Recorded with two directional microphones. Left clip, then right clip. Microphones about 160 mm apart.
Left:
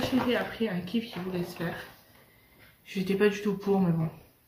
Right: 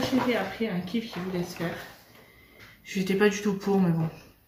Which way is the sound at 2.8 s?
5° left (ahead or behind).